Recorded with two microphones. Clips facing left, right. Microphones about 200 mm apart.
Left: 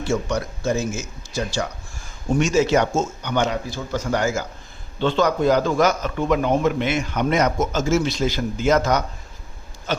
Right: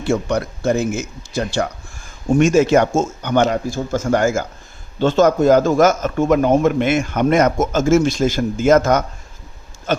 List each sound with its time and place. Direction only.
0.0 s a man's voice: 60° right (ahead or behind)